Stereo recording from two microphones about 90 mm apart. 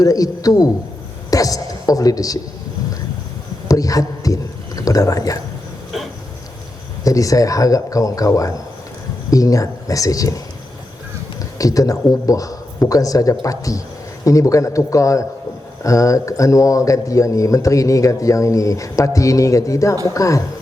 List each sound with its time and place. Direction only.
0.0 s a man's voice: 40° left (ahead or behind)
3.7 s a man's voice: 40° left (ahead or behind)
7.0 s speech: 40° left (ahead or behind)
11.5 s speech: 40° left (ahead or behind)